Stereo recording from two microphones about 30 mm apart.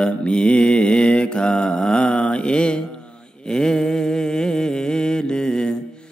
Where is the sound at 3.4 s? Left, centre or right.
Left.